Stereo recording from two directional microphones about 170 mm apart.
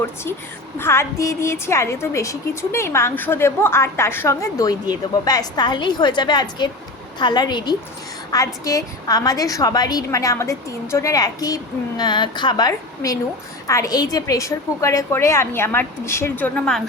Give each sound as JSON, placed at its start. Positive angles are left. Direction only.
{"t": 0.8, "sound": "a woman's voice", "side_deg": 15}